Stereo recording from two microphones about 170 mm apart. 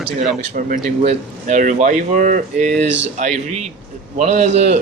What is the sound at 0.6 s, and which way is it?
A man's voice, 55° right (ahead or behind).